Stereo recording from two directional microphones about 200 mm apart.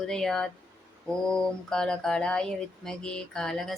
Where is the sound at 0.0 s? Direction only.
5° left (ahead or behind).